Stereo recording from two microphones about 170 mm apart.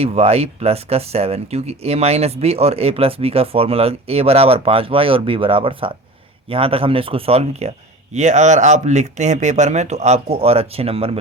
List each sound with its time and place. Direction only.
0.0 s speech: 35° right (ahead or behind)